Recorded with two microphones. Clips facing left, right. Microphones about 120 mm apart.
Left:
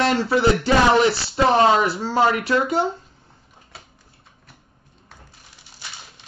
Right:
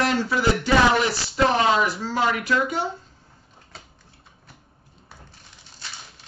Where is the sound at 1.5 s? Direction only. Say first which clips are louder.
Left 7 dB; 30° left (ahead or behind).